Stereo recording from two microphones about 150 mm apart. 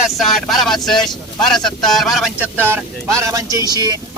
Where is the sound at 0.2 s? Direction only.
Centre (ahead or behind).